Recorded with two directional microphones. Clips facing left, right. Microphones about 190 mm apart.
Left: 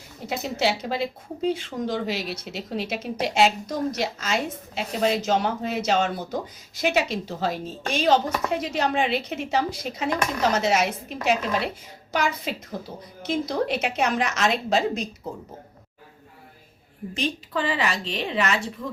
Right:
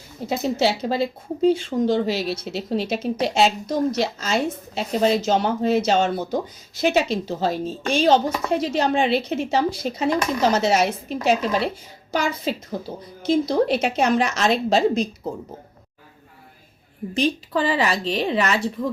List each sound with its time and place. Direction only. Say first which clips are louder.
0.6 s speech: right 2 dB; 30° right (ahead or behind)
17.2 s speech: right 6 dB; 35° right (ahead or behind)